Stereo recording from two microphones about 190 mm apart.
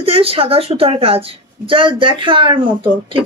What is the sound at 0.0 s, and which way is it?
Speech, 30° right (ahead or behind).